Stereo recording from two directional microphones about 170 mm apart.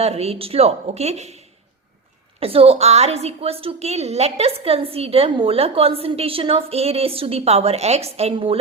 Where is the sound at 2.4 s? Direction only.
35° right (ahead or behind).